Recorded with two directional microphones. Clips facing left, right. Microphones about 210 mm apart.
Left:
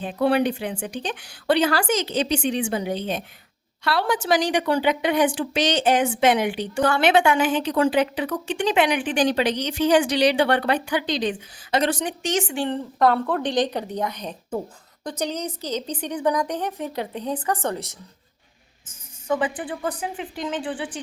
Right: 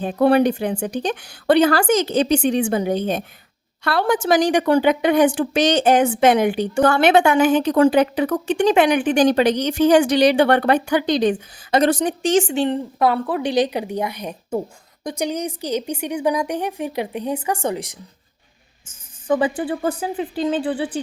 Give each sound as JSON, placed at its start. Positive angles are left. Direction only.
{"t": 0.0, "sound": "a woman's voice", "side_deg": -45}
{"t": 12.6, "sound": "a woman's voice", "side_deg": -10}
{"t": 18.9, "sound": "a woman's voice", "side_deg": -35}